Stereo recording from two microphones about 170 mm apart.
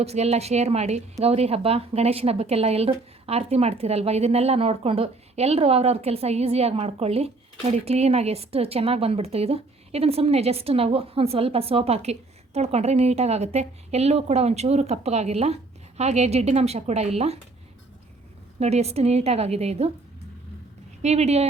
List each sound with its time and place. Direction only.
0.0 s speech: 40° right (ahead or behind)
18.6 s speech: 40° right (ahead or behind)
21.0 s speech: 40° right (ahead or behind)